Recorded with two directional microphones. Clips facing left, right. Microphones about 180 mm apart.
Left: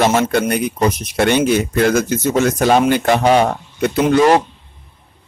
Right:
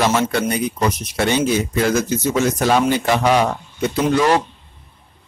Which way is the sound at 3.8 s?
60° left (ahead or behind).